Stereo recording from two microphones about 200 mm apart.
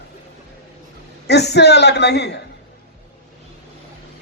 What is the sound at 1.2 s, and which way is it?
Speech, 55° left (ahead or behind).